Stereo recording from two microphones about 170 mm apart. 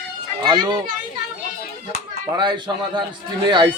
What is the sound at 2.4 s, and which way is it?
Speech, 25° right (ahead or behind).